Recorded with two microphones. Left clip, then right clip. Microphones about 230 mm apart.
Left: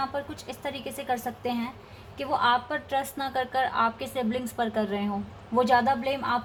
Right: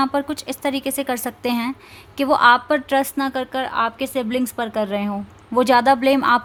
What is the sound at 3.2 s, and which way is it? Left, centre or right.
A woman's voice, right.